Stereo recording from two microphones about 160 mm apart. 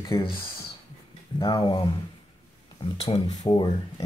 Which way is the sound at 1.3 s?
25° left (ahead or behind).